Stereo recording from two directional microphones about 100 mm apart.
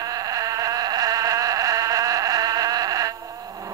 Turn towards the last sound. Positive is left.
turn(degrees=-35)  # may be behind; listen again after turning